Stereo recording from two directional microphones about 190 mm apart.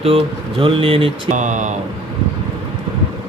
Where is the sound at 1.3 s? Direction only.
40° right (ahead or behind).